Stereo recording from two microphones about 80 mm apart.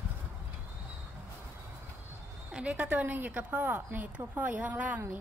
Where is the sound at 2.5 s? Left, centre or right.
Centre.